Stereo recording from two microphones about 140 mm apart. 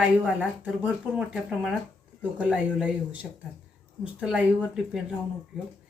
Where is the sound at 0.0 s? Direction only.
10° right (ahead or behind).